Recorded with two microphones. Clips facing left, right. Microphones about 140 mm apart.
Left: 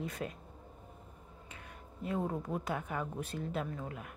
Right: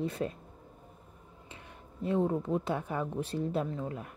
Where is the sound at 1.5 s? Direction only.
30° right (ahead or behind).